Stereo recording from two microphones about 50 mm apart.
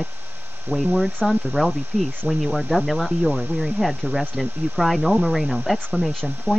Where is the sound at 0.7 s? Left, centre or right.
Centre.